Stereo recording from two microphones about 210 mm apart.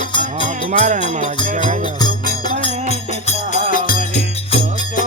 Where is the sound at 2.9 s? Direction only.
35° left (ahead or behind).